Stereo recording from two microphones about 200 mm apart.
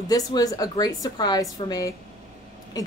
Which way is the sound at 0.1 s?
20° left (ahead or behind).